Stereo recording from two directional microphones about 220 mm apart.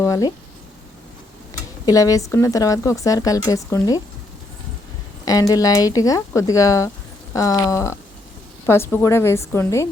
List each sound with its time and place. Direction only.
0.0 s a sound: 15° left (ahead or behind)
1.8 s speech: 15° left (ahead or behind)
5.2 s speech: 15° left (ahead or behind)